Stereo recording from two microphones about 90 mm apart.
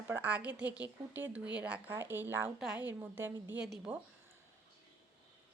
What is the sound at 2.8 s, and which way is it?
Speech, 25° right (ahead or behind).